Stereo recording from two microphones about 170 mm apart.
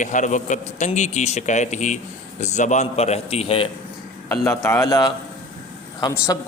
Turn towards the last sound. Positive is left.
turn(degrees=20)  # may be behind; listen again after turning